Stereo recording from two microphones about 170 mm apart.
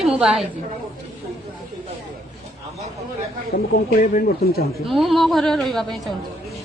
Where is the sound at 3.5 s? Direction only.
65° left (ahead or behind).